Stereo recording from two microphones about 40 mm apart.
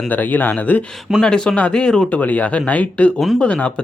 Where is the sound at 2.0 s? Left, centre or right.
Left.